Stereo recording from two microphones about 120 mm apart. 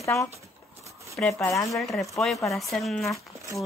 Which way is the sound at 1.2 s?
5° left (ahead or behind).